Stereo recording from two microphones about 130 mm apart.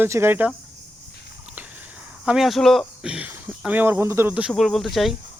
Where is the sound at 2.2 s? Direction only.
Centre (ahead or behind).